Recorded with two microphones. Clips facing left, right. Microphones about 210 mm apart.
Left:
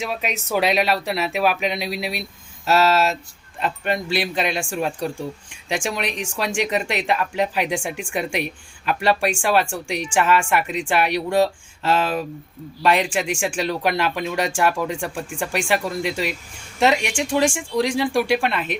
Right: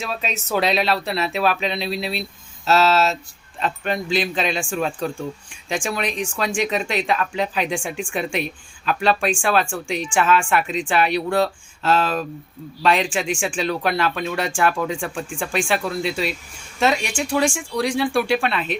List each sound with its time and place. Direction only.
0.0 s speech: 15° left (ahead or behind)